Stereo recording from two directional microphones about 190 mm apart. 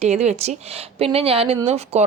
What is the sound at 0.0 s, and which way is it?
A woman's voice, 35° right (ahead or behind).